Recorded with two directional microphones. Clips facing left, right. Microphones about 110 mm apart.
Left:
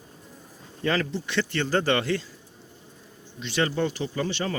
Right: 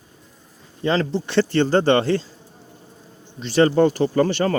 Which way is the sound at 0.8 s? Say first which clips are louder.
Right 5 dB; 25° right (ahead or behind).